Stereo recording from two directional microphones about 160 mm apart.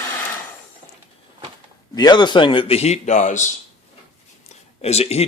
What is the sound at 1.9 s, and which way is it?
Speech, 25° left (ahead or behind).